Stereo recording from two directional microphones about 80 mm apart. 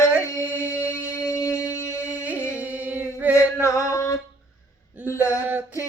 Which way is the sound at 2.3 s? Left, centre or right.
Left.